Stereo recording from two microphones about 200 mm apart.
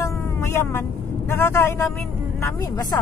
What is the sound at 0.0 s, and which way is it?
Vehicle, 15° left (ahead or behind).